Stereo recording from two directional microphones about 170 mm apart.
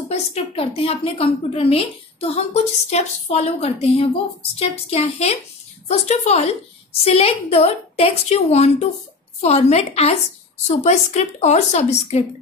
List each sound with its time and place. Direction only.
0.1 s a woman's voice: 35° left (ahead or behind)